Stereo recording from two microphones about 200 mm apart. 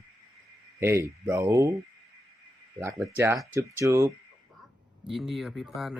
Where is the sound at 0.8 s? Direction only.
15° right (ahead or behind).